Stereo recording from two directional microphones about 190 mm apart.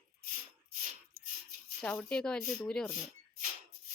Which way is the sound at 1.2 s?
45° right (ahead or behind).